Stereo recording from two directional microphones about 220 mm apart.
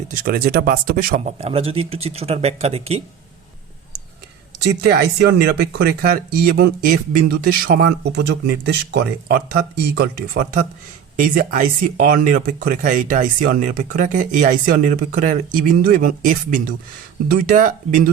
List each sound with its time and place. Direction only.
0.1 s speech: 45° right (ahead or behind)
1.4 s speech: 25° right (ahead or behind)
5.4 s speech: 45° right (ahead or behind)